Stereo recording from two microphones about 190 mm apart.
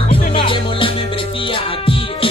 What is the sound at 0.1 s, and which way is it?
Music, 30° left (ahead or behind).